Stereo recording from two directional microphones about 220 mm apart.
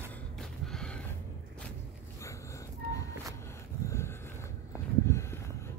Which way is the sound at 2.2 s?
15° left (ahead or behind).